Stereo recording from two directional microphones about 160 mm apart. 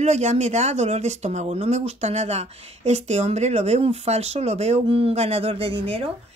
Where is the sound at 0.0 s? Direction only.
45° right (ahead or behind).